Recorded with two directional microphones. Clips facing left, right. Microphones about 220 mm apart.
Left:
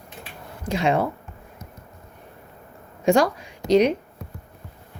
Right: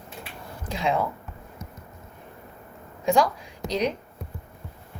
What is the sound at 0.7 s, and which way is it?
Speech, 75° left (ahead or behind).